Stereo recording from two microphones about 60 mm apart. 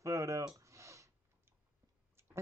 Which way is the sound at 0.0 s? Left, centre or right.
Right.